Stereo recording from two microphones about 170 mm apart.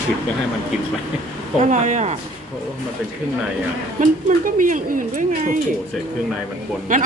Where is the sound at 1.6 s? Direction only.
45° right (ahead or behind).